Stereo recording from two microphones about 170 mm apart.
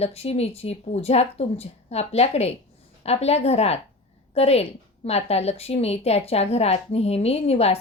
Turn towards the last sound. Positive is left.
turn(degrees=35)  # may be behind; listen again after turning